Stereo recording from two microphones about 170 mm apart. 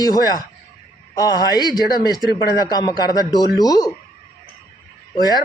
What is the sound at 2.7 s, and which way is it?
Speech, 20° left (ahead or behind).